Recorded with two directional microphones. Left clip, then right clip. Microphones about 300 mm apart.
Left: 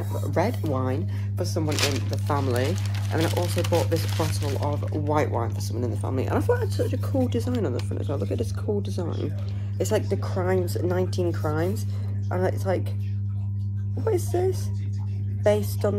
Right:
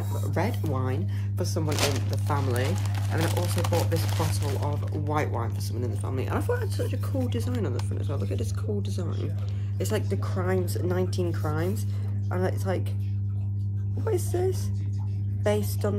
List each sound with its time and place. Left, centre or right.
0.2 s a sound: centre
0.7 s speech: centre
1.7 s speech: right
2.2 s speech: centre
14.0 s speech: centre